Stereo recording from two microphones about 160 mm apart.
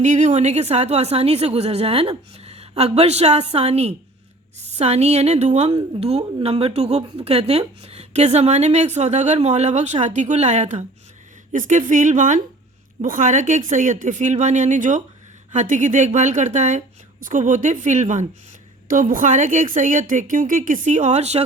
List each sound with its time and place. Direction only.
0.0 s a woman's voice: 50° right (ahead or behind)